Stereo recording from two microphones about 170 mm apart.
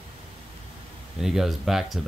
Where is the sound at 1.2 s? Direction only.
Centre (ahead or behind).